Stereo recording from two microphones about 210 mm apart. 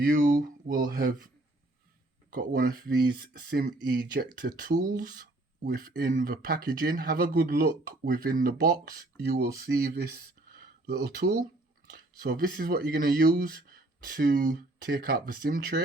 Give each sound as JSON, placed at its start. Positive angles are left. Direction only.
{"t": 0.0, "sound": "speech", "side_deg": -40}
{"t": 2.3, "sound": "speech", "side_deg": -40}